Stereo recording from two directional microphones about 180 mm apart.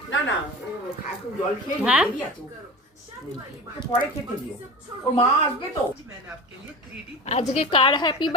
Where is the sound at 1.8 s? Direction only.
5° right (ahead or behind).